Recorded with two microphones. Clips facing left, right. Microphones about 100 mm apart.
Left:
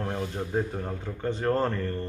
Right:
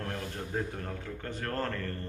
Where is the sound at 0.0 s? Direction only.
15° left (ahead or behind).